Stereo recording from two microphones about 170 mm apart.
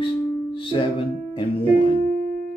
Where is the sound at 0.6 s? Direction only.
30° left (ahead or behind).